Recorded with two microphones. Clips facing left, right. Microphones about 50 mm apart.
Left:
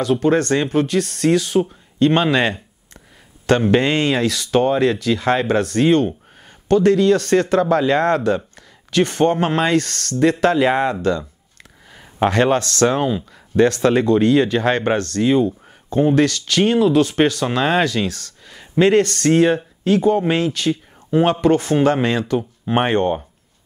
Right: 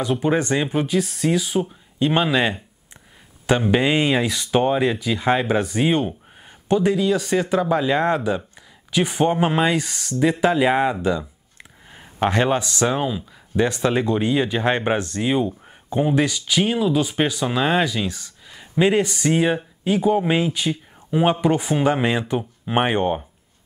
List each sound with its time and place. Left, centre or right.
0.0 s speech: centre
12.3 s speech: centre